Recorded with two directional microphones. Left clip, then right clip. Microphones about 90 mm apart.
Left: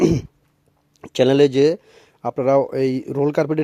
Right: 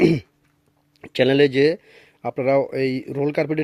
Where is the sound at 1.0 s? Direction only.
30° left (ahead or behind).